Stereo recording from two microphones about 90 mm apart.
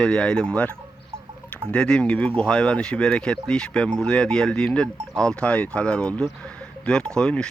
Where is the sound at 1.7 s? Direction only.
10° left (ahead or behind).